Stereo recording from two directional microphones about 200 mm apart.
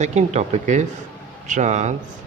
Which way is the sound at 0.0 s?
35° right (ahead or behind).